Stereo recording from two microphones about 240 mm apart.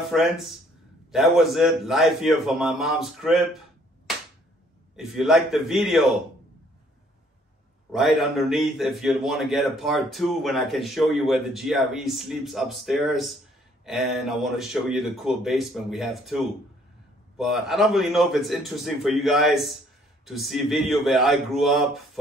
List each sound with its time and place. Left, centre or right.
0.0 s a man's voice: centre
4.9 s a man's voice: centre
7.9 s a man's voice: centre